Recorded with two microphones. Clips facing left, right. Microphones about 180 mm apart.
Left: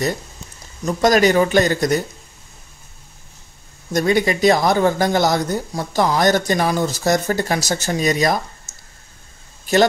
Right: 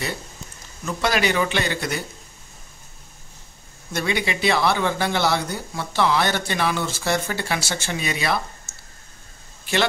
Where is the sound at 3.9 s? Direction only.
40° left (ahead or behind).